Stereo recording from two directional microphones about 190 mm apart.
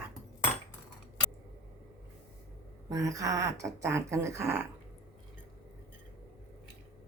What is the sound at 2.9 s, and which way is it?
Speech, 15° right (ahead or behind).